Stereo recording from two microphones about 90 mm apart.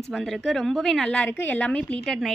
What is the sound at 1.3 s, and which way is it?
A woman's voice, 20° left (ahead or behind).